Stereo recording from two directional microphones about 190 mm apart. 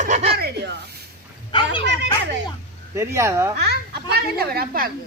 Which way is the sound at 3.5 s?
60° right (ahead or behind).